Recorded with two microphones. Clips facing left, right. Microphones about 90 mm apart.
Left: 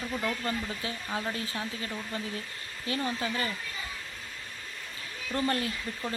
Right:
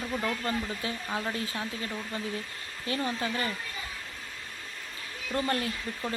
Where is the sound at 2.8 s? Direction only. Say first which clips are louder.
Right 1 dB; 30° right (ahead or behind).